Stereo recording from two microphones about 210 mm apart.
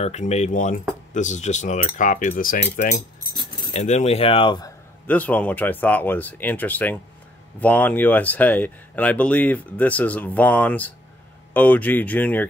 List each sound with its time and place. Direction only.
0.0 s speech: 30° left (ahead or behind)
5.0 s speech: 5° left (ahead or behind)